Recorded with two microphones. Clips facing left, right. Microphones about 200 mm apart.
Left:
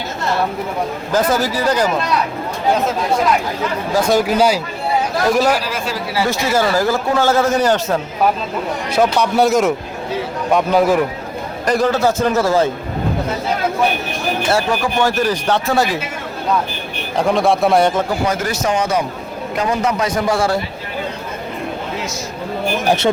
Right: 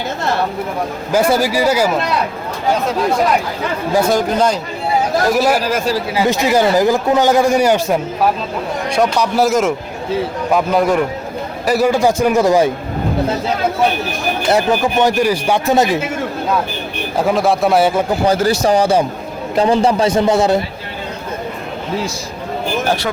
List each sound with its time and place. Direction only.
1.1 s speech: 10° right (ahead or behind)
4.1 s speech: 5° left (ahead or behind)
5.3 s speech: 10° right (ahead or behind)
5.6 s speech: 45° right (ahead or behind)
6.1 s speech: 15° right (ahead or behind)
8.9 s speech: centre (ahead or behind); by 12.7 s 15° right (ahead or behind)
14.5 s speech: 20° right (ahead or behind)
17.2 s speech: centre (ahead or behind)
18.3 s a man's voice: 30° right (ahead or behind)
22.8 s speech: 15° left (ahead or behind)